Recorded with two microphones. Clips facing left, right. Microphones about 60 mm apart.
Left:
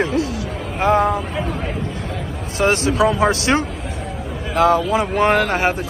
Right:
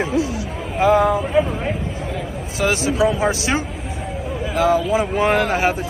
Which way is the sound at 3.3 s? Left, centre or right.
Left.